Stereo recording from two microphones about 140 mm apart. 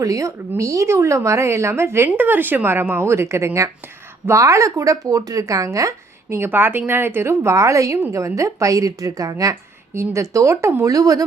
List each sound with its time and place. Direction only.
0.0 s a woman's voice: 25° right (ahead or behind)